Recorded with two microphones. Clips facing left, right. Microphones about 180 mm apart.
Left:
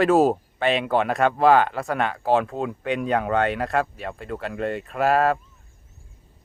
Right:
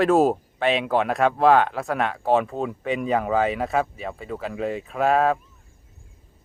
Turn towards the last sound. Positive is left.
turn(degrees=0)  # may be behind; listen again after turning